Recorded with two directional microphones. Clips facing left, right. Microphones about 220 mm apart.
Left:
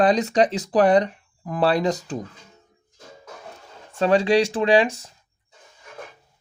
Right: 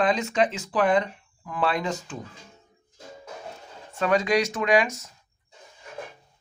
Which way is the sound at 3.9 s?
30° left (ahead or behind).